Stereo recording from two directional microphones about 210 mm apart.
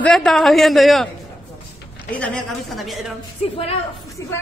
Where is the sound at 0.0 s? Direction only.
Centre (ahead or behind).